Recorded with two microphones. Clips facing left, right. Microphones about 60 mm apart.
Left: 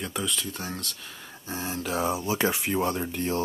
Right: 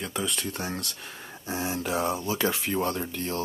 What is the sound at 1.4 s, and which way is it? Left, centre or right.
Speech, centre.